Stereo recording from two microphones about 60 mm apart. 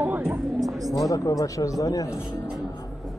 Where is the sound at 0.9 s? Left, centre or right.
Left.